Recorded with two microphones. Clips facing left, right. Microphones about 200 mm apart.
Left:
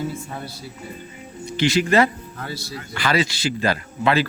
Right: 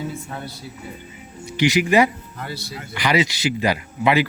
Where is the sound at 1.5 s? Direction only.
15° right (ahead or behind).